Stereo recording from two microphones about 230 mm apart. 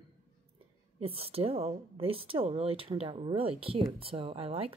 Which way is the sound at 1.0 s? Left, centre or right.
Right.